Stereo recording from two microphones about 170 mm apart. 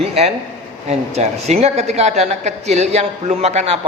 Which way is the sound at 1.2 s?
40° right (ahead or behind).